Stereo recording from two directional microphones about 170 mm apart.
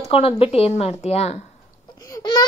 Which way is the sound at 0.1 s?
35° left (ahead or behind).